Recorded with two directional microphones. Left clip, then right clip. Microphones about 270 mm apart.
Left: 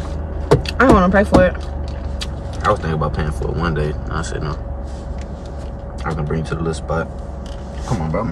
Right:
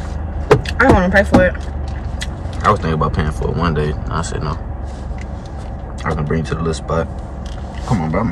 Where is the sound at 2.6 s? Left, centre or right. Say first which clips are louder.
Right 3 dB; centre.